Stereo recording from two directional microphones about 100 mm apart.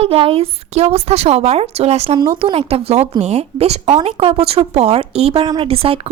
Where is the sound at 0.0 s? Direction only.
75° right (ahead or behind).